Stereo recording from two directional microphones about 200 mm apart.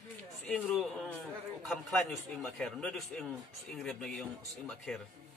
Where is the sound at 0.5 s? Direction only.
5° left (ahead or behind).